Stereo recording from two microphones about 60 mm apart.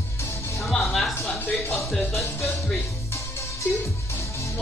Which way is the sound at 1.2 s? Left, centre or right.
Left.